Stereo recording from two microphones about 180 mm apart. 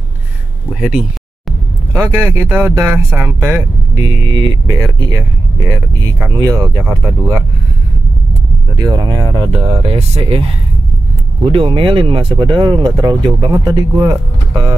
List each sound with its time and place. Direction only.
0.7 s speech: centre (ahead or behind)
3.9 s speech: 20° right (ahead or behind)
8.7 s speech: 20° right (ahead or behind)
9.6 s speech: 35° right (ahead or behind)
11.5 s speech: 30° right (ahead or behind)